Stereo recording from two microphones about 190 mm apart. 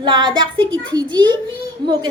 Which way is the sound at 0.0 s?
25° right (ahead or behind).